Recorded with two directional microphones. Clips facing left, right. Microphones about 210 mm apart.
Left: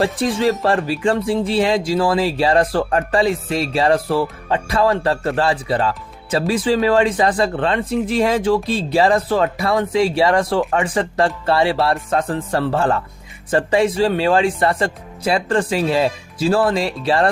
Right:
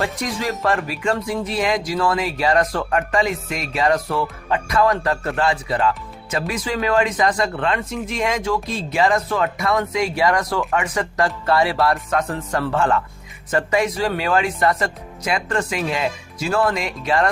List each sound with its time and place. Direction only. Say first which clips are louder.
0.0 s speech: left 7 dB; 30° left (ahead or behind)